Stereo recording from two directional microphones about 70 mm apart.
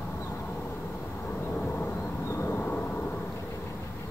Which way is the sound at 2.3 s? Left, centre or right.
Left.